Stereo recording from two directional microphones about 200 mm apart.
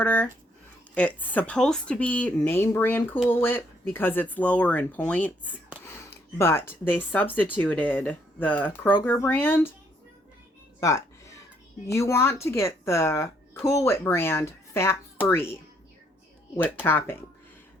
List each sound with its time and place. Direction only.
0.0 s speech: 5° left (ahead or behind)
10.8 s music: 15° left (ahead or behind)
11.9 s speech: 15° left (ahead or behind)
16.8 s speech: 10° left (ahead or behind)